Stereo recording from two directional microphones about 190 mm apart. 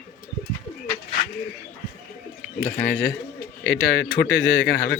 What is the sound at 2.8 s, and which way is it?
Speech, 60° left (ahead or behind).